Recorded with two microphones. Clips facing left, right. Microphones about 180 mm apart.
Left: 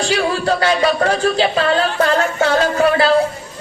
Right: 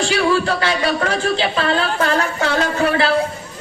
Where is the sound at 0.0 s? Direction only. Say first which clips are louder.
Right 1 dB; 35° left (ahead or behind).